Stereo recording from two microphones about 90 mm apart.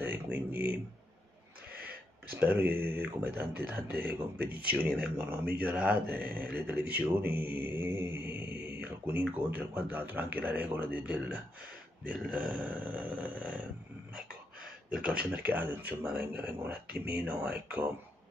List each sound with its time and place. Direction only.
0.0 s speech: 20° right (ahead or behind)
2.3 s speech: 20° right (ahead or behind)
14.9 s speech: 10° right (ahead or behind)